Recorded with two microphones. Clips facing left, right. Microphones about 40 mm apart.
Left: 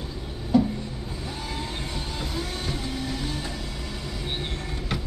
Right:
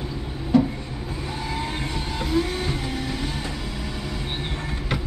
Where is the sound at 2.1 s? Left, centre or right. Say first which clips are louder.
Right 11 dB; right.